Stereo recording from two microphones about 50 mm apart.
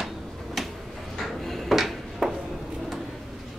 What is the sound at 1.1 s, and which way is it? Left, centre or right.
Drawer open or close, centre.